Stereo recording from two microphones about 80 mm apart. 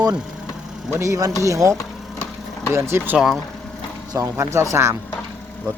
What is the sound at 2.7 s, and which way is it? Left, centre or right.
Speech, right.